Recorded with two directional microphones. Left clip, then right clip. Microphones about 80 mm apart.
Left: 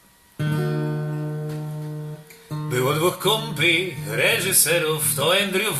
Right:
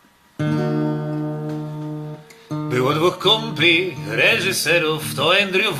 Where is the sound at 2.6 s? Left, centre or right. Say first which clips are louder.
Right 3 dB; right.